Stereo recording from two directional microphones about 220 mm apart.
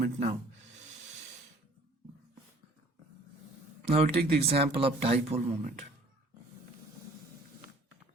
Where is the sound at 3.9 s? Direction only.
25° right (ahead or behind).